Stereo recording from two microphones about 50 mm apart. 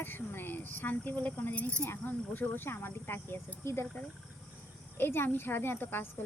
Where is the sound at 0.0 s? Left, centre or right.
Left.